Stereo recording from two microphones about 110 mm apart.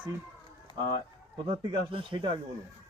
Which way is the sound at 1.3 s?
45° right (ahead or behind).